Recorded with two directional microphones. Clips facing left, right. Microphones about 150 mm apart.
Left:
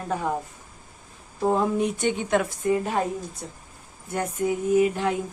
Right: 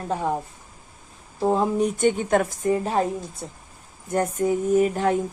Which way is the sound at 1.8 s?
45° right (ahead or behind).